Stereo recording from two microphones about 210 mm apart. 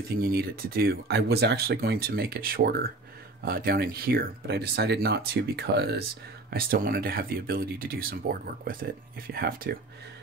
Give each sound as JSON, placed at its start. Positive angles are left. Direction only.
{"t": 0.1, "sound": "speech", "side_deg": -45}